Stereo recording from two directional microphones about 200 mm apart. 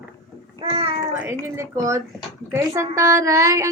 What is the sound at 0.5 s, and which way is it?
Babbling, 30° right (ahead or behind).